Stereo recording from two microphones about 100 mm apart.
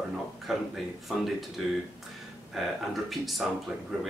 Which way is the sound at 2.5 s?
Centre (ahead or behind).